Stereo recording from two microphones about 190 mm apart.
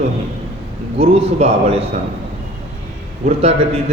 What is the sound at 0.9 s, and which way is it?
Speech, 30° right (ahead or behind).